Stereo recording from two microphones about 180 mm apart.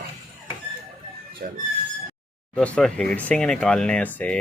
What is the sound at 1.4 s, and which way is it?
Speech, 55° right (ahead or behind).